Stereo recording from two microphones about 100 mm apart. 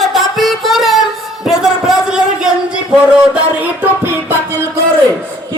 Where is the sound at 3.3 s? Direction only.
15° right (ahead or behind).